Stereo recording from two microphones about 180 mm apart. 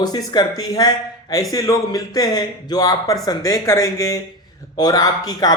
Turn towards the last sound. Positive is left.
turn(degrees=20)  # may be behind; listen again after turning